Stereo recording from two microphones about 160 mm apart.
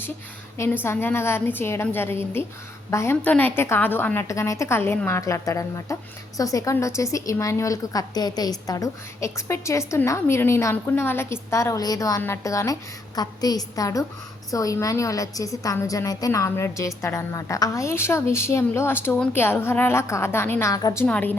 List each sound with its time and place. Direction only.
0.5 s a woman's voice: 15° left (ahead or behind)